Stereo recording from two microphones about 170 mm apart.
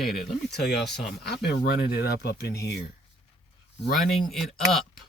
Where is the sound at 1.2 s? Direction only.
70° left (ahead or behind).